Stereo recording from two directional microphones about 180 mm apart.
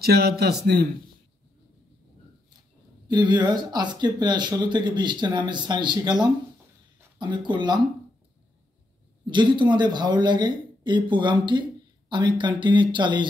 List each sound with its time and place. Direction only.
0.0 s a man's voice: 60° right (ahead or behind)
3.1 s speech: 25° right (ahead or behind)
7.2 s speech: 25° right (ahead or behind)
9.3 s speech: 25° right (ahead or behind)